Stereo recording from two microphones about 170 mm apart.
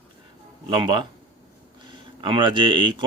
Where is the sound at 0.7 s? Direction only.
30° right (ahead or behind).